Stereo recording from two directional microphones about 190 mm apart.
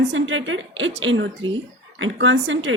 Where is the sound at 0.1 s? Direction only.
85° right.